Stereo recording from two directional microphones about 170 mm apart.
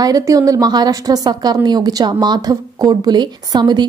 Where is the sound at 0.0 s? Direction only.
20° right (ahead or behind).